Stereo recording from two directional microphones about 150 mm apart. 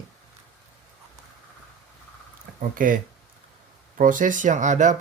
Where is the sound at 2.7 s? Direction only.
65° right (ahead or behind).